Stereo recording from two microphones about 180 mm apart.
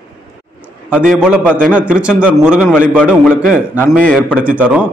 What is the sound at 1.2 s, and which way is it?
A man's voice, 5° right (ahead or behind).